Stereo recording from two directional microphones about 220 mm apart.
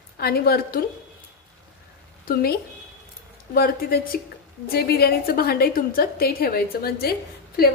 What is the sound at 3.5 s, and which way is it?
A woman's voice, 40° left (ahead or behind).